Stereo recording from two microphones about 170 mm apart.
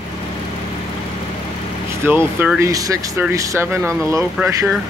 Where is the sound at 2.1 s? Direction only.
10° right (ahead or behind).